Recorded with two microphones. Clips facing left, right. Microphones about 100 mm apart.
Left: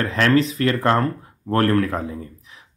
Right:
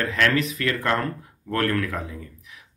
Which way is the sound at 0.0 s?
35° left (ahead or behind).